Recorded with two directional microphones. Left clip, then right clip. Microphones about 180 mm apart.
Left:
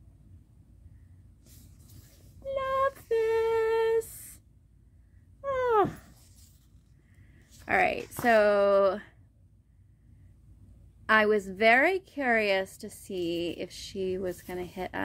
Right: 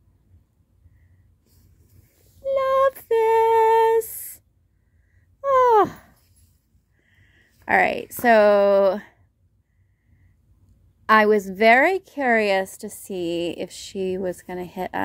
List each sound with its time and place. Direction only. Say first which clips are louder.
2.4 s female singing: right 9 dB; 40° right (ahead or behind)
5.4 s a sound: right 10 dB; 45° right (ahead or behind)
7.3 s speech: right 7 dB; 45° right (ahead or behind)
11.1 s a woman's voice: right 7 dB; 40° right (ahead or behind)